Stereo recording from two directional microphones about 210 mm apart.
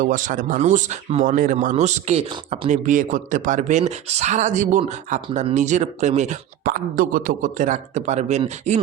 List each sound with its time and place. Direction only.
0.0 s speech: 40° right (ahead or behind)